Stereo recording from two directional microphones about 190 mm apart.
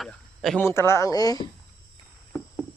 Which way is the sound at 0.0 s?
5° left (ahead or behind).